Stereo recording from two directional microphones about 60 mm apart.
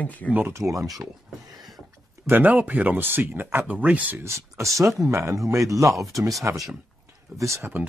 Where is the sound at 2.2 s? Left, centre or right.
Right.